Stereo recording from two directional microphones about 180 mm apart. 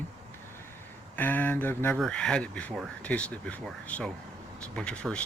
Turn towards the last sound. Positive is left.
turn(degrees=5)  # may be behind; listen again after turning